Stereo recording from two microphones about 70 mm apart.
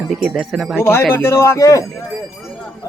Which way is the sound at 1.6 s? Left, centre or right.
Left.